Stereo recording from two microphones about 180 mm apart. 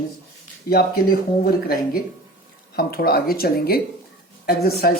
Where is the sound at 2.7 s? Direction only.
60° left (ahead or behind).